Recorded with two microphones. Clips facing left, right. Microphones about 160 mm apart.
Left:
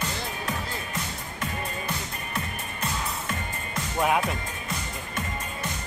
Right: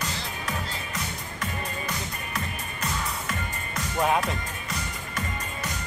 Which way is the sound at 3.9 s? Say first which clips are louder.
Even; 5° left (ahead or behind).